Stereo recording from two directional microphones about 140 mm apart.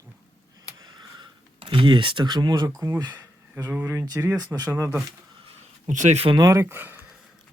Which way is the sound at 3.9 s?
25° right (ahead or behind).